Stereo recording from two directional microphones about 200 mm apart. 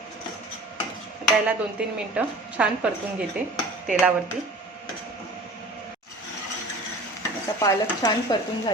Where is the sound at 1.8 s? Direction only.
5° right (ahead or behind).